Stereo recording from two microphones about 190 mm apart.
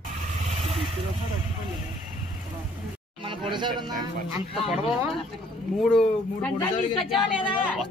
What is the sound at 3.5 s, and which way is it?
Speech, 25° right (ahead or behind).